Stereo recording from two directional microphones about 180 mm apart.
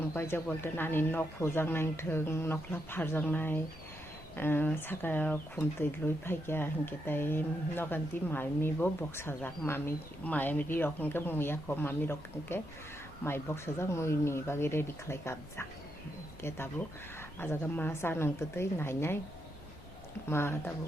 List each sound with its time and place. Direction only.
0.1 s speech: 15° left (ahead or behind)
20.3 s speech: 15° left (ahead or behind)